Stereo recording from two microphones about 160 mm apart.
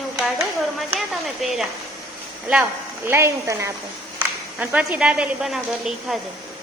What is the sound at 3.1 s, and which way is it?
A woman's voice, 15° right (ahead or behind).